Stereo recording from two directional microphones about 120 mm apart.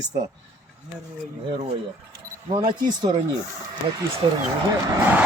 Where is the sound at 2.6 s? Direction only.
40° right (ahead or behind).